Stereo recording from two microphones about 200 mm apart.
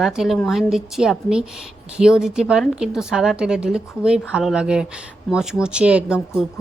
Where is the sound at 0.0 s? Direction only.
Centre (ahead or behind).